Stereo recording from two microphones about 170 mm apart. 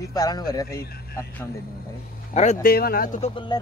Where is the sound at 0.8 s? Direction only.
65° left (ahead or behind).